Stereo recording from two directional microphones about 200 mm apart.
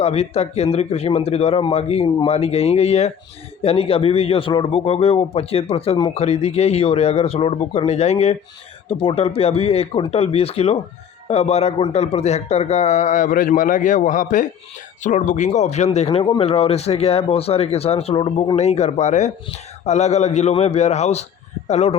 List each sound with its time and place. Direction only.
0.0 s a man's voice: 30° left (ahead or behind)
16.0 s a man's voice: 25° left (ahead or behind)